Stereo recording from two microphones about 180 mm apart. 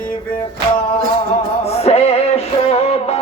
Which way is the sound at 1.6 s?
35° left (ahead or behind).